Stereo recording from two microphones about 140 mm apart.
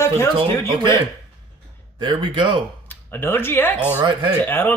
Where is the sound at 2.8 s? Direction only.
15° left (ahead or behind).